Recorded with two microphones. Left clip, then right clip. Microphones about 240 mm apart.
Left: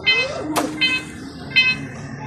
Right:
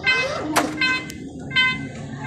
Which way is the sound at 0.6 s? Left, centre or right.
Centre.